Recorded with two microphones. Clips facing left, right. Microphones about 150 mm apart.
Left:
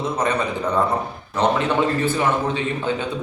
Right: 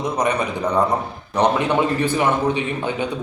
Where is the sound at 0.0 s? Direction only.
15° right (ahead or behind).